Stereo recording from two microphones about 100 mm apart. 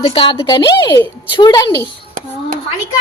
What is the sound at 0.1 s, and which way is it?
Speech, 60° left (ahead or behind).